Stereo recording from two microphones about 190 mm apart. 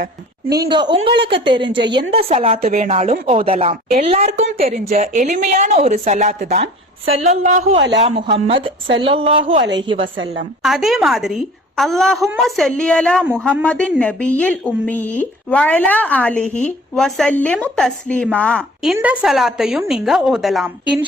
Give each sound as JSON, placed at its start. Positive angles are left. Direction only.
{"t": 0.6, "sound": "a woman's voice", "side_deg": -25}
{"t": 10.6, "sound": "a woman's voice", "side_deg": 0}
{"t": 18.9, "sound": "a woman's voice", "side_deg": -5}